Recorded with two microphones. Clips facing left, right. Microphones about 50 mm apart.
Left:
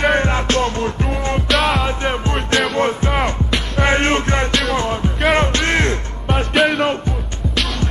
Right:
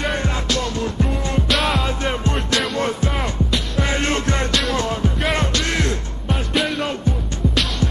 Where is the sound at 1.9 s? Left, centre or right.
Left.